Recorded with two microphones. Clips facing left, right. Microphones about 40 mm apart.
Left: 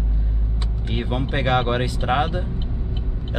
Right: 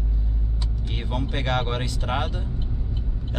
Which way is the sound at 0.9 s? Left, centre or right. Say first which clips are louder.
Left 5 dB; left.